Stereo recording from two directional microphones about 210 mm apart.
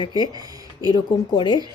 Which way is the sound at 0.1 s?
20° right (ahead or behind).